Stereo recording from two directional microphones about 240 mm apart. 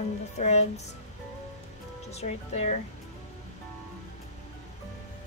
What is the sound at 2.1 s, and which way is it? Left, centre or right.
Speech, left.